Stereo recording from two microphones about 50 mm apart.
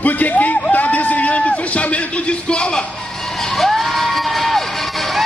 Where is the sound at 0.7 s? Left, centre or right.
Left; by 5.2 s centre.